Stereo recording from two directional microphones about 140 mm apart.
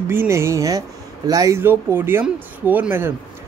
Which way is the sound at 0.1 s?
15° right (ahead or behind).